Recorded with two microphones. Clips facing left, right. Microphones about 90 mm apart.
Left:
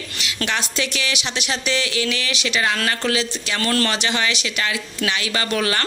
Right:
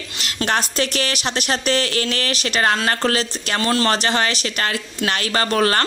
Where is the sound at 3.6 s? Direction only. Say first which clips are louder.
Right 2 dB; 25° right (ahead or behind).